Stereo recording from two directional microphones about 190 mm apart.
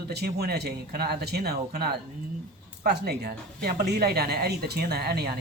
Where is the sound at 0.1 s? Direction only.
55° right (ahead or behind).